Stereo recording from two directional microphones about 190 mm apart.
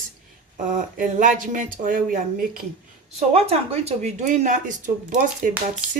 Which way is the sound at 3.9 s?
40° right (ahead or behind).